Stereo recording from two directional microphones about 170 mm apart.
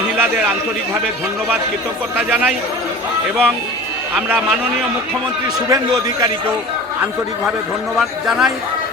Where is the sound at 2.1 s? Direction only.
10° right (ahead or behind).